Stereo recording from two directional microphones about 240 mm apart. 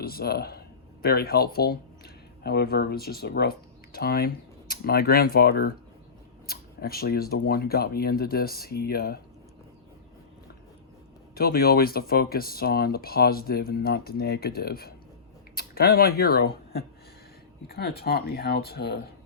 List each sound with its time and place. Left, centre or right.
0.0 s speech: left
11.3 s speech: left